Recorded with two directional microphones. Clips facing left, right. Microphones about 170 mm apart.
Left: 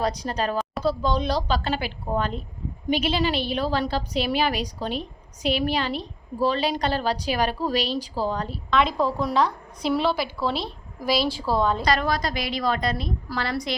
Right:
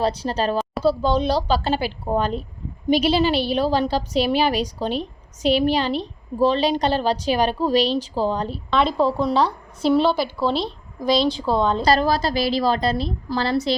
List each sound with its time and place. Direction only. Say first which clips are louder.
0.0 s a woman's voice: right 4 dB; 30° right (ahead or behind)
10.5 s a woman's voice: right 5 dB; 5° left (ahead or behind)
11.3 s a woman's voice: right 3 dB; 20° right (ahead or behind)